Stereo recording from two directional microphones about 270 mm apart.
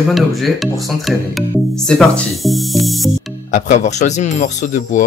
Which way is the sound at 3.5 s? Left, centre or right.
Left.